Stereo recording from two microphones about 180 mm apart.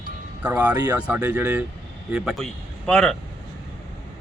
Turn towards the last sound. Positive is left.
turn(degrees=5)  # may be behind; listen again after turning